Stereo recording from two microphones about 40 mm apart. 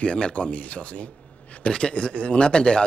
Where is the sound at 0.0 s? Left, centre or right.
Left.